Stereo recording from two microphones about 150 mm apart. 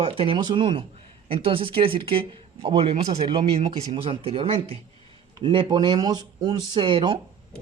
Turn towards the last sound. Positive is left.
turn(degrees=-35)  # may be behind; listen again after turning